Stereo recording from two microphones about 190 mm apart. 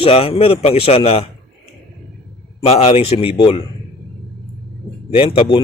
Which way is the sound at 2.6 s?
30° left (ahead or behind).